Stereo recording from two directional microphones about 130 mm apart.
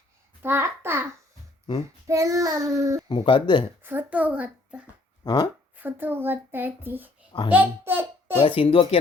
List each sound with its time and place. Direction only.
0.4 s a child's voice: 15° right (ahead or behind)
2.0 s child singing: 25° right (ahead or behind)
3.1 s speech: 40° left (ahead or behind)
3.8 s a child's voice: 15° right (ahead or behind)
5.2 s speech: 30° left (ahead or behind)
5.7 s a child's voice: 15° right (ahead or behind)
8.4 s speech: 45° left (ahead or behind)